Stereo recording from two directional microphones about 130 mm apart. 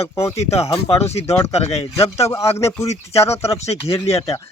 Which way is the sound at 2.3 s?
20° left (ahead or behind).